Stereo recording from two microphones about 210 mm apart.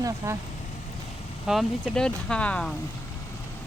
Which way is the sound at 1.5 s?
Centre (ahead or behind).